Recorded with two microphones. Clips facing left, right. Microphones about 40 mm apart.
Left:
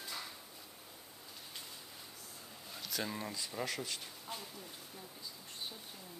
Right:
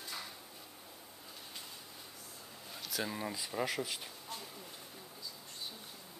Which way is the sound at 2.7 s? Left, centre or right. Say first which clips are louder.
Right 1 dB; centre.